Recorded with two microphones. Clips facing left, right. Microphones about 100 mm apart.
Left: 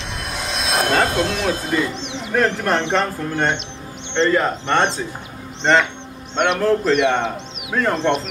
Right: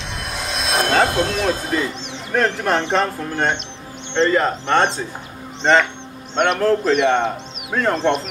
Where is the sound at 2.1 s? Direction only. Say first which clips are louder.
Even; centre (ahead or behind).